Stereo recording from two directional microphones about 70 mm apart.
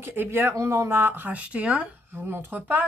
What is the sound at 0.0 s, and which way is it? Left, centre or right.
Speech, right.